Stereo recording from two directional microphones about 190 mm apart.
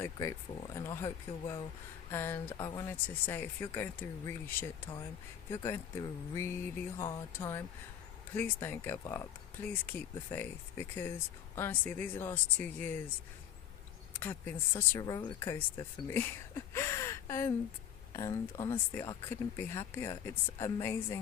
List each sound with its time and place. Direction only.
0.0 s speech: 15° left (ahead or behind)
14.1 s speech: 10° left (ahead or behind)